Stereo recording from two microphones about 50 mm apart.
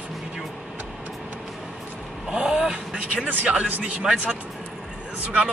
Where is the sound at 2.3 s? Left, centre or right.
Centre.